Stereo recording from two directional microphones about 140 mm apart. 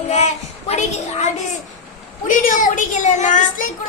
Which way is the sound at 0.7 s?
55° left (ahead or behind).